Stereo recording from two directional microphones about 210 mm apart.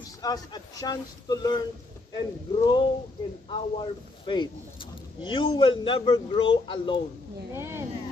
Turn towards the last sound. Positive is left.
turn(degrees=-10)  # may be behind; listen again after turning